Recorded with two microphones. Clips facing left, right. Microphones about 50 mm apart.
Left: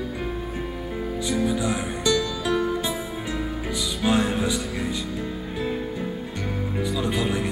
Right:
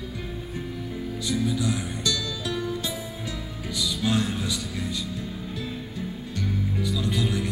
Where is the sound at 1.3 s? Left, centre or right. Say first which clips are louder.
Left 2 dB; left.